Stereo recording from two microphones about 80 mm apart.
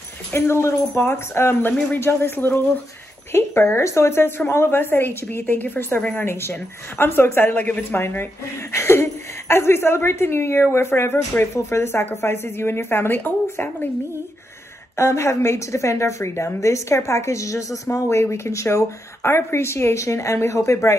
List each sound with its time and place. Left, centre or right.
0.3 s a woman's voice: left; by 6.2 s centre
6.2 s speech: left
8.7 s a sound: left
9.5 s a woman's voice: left
15.0 s a woman's voice: left